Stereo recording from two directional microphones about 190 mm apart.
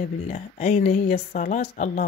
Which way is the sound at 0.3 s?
35° left (ahead or behind).